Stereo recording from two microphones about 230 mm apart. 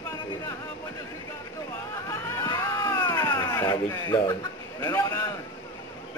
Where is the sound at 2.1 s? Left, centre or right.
Centre.